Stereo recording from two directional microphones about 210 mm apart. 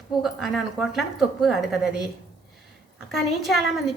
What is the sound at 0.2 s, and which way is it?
A woman's voice, centre (ahead or behind).